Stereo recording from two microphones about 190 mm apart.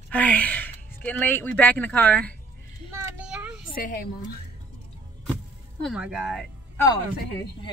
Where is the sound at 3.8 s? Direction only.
45° left (ahead or behind).